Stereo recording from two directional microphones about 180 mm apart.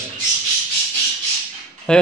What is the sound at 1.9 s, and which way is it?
Speech, 5° left (ahead or behind).